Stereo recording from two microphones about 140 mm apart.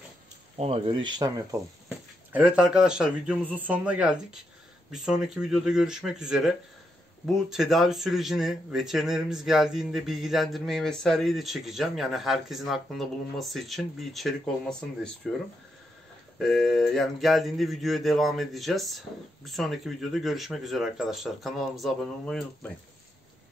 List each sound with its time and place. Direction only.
0.6 s speech: 40° right (ahead or behind)
1.9 s a man's voice: 5° right (ahead or behind)